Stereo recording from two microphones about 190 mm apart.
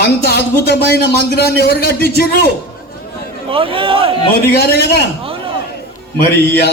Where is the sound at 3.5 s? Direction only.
30° right (ahead or behind).